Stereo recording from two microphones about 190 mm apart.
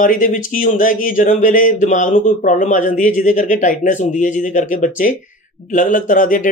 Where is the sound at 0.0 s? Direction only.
45° left (ahead or behind).